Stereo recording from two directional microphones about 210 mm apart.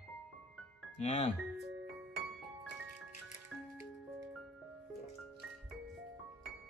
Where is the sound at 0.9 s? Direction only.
35° left (ahead or behind).